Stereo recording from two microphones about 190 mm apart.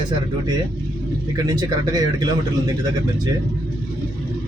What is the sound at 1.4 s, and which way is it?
A man's voice, 20° right (ahead or behind).